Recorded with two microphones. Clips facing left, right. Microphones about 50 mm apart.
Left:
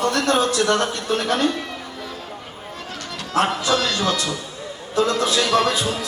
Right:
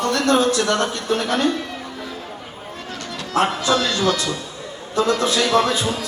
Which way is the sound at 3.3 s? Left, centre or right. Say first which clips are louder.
Right 1 dB; right.